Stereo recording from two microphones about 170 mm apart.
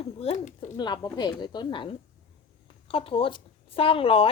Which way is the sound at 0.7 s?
25° left (ahead or behind).